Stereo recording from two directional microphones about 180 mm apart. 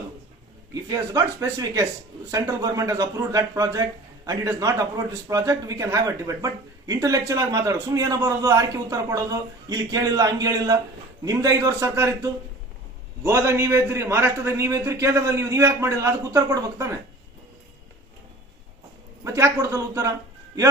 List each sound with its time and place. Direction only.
0.7 s a man's voice: 20° right (ahead or behind)
19.2 s a man's voice: 15° right (ahead or behind)